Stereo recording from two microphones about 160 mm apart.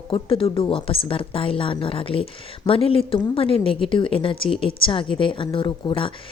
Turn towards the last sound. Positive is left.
turn(degrees=30)  # may be behind; listen again after turning